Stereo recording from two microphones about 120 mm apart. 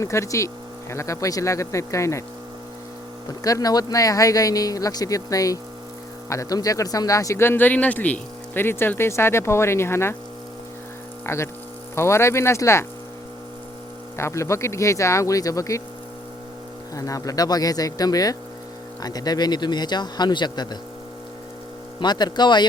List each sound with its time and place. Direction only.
0.0 s speech: 25° left (ahead or behind)
3.4 s speech: 30° left (ahead or behind)
11.3 s speech: 20° left (ahead or behind)
14.2 s speech: 25° left (ahead or behind)
16.9 s a man's voice: 30° left (ahead or behind)
22.0 s a man's voice: 35° left (ahead or behind)